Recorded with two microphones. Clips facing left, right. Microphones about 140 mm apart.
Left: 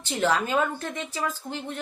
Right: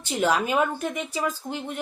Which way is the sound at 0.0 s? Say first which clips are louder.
Right 1 dB; 15° right (ahead or behind).